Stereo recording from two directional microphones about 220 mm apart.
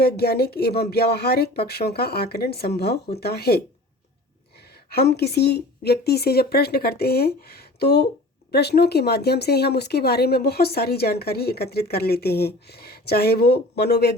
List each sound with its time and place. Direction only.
0.0 s speech: 45° left (ahead or behind)
4.9 s speech: 45° left (ahead or behind)